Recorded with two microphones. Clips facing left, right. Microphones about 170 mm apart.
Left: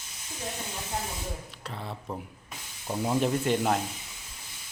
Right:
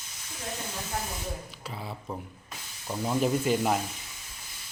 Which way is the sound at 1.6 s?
5° right (ahead or behind).